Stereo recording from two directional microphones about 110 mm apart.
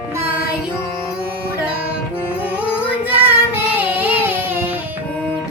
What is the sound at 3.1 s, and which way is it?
Child singing, 15° right (ahead or behind).